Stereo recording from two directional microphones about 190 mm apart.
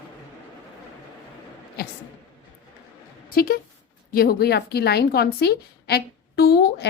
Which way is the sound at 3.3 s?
50° left (ahead or behind).